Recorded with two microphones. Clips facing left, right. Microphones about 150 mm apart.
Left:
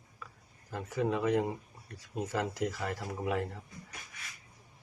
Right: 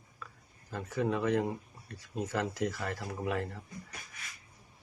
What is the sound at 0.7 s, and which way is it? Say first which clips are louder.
Speech: even; 15° left (ahead or behind).